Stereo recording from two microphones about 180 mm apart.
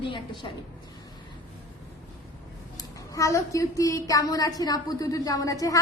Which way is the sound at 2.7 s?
20° left (ahead or behind).